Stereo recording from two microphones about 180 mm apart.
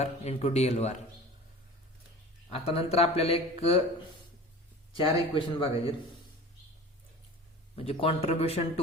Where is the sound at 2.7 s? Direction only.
35° left (ahead or behind).